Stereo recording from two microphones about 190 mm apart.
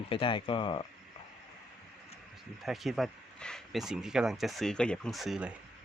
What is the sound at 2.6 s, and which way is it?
Speech, centre (ahead or behind).